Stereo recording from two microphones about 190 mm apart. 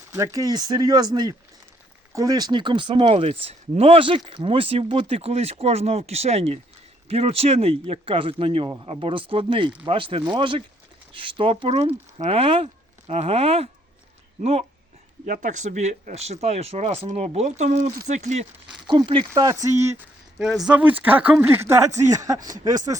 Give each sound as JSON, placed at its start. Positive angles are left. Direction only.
{"t": 0.1, "sound": "speech", "side_deg": -15}
{"t": 15.3, "sound": "speech", "side_deg": -40}
{"t": 18.9, "sound": "speech", "side_deg": -25}
{"t": 20.4, "sound": "speech", "side_deg": 0}
{"t": 22.5, "sound": "speech", "side_deg": -45}